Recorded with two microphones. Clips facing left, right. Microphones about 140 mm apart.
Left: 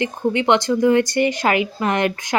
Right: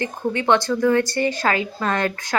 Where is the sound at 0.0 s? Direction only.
20° left (ahead or behind).